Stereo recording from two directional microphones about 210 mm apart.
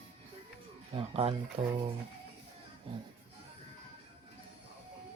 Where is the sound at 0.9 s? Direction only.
25° right (ahead or behind).